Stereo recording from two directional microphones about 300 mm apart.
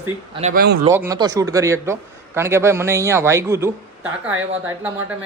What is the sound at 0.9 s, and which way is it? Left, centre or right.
A man's voice, centre.